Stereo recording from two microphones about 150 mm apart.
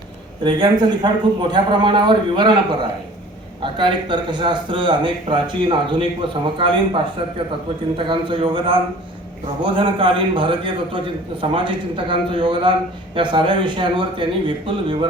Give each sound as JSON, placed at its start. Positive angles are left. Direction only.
{"t": 0.4, "sound": "a man's voice", "side_deg": -30}